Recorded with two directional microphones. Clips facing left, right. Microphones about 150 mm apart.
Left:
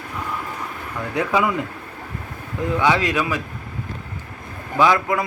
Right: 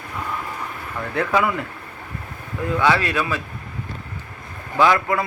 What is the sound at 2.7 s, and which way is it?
Speech, 15° left (ahead or behind).